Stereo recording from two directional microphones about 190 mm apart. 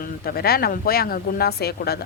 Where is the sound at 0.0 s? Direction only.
55° left (ahead or behind).